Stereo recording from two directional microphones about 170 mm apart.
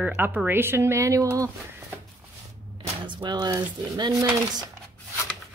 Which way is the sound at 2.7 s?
30° right (ahead or behind).